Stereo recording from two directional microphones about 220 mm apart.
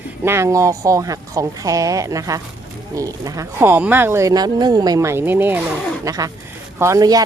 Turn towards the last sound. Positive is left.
turn(degrees=-15)  # may be behind; listen again after turning